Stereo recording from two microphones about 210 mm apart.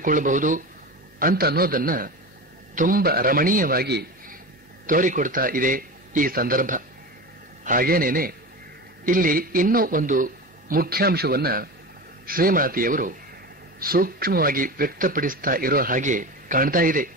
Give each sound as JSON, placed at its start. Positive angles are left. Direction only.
{"t": 0.0, "sound": "a man's voice", "side_deg": -40}